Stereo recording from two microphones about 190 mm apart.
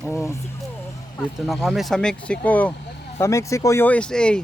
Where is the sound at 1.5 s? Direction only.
Centre (ahead or behind).